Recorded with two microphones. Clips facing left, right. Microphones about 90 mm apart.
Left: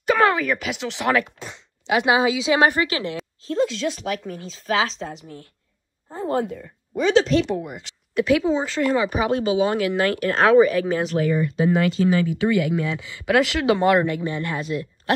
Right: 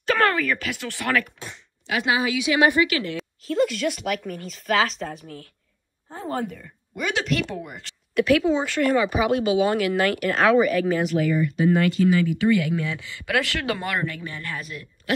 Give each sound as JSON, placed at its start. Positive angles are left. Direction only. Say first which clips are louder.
{"t": 0.0, "sound": "speech", "louder": "left 3 dB", "side_deg": 15}
{"t": 7.0, "sound": "speech", "louder": "left 8 dB", "side_deg": 30}
{"t": 7.5, "sound": "a woman's voice", "louder": "left 5 dB", "side_deg": 20}
{"t": 9.1, "sound": "speech", "louder": "even", "side_deg": 35}